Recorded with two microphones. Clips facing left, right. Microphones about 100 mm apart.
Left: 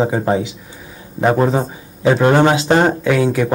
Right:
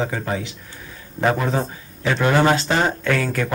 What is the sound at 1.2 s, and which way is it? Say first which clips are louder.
Speech: left 4 dB; 5° left (ahead or behind).